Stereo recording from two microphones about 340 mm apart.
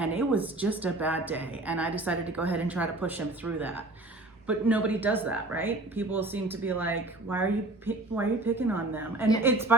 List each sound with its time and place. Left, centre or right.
0.0 s a woman's voice: centre